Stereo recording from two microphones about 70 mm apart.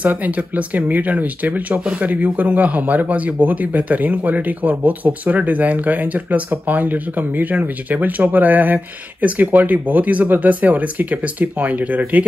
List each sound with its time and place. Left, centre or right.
0.0 s speech: right